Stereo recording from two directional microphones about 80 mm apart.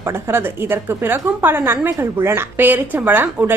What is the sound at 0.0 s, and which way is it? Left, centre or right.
A woman's voice, right.